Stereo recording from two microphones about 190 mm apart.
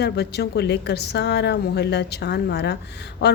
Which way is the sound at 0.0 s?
60° left (ahead or behind).